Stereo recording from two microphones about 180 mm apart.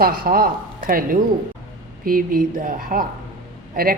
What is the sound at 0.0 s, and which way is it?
A woman's voice, 55° right (ahead or behind).